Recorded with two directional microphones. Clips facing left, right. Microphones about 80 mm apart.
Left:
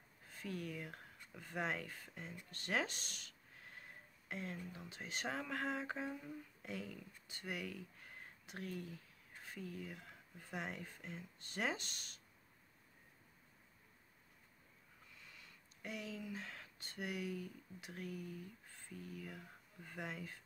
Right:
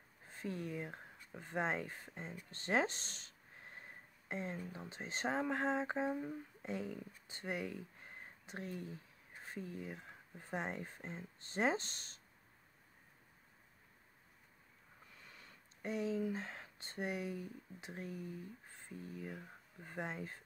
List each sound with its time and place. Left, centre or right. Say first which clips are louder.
0.3 s speech: right 3 dB; right
15.3 s speech: right 2 dB; right